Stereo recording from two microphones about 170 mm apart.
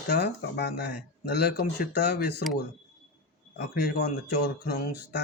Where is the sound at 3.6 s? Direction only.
70° left (ahead or behind).